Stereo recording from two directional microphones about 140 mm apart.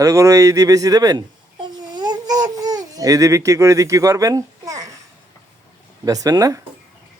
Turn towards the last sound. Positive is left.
turn(degrees=-25)  # may be behind; listen again after turning